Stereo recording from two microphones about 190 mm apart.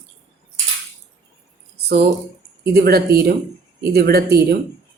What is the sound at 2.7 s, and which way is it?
Speech, 55° right (ahead or behind).